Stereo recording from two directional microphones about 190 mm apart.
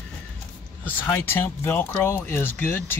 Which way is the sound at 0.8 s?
10° left (ahead or behind).